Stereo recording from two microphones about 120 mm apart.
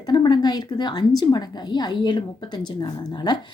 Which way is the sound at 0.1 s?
35° left (ahead or behind).